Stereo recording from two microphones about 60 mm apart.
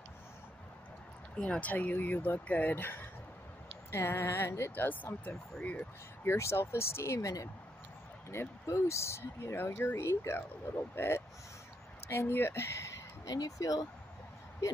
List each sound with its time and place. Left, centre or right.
1.3 s speech: centre
6.2 s speech: left
8.3 s speech: left
12.3 s a sound: left
13.3 s speech: left